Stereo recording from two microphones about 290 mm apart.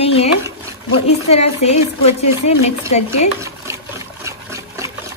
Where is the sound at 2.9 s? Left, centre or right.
Left.